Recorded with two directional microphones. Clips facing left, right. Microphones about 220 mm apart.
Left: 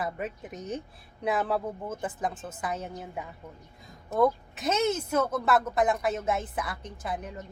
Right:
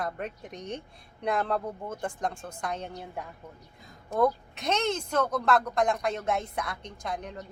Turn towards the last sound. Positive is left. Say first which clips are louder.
# even
turn(degrees=5)  # may be behind; listen again after turning